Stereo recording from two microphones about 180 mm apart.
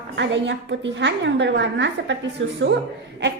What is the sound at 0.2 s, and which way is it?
A woman's voice, 90° right.